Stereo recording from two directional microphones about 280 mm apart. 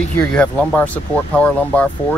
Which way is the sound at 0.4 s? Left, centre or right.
Centre.